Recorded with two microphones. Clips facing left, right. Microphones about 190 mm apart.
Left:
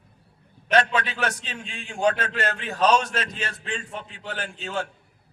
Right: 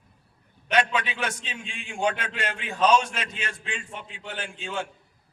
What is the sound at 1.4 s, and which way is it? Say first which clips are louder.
Speech: left 2 dB; 40° left (ahead or behind).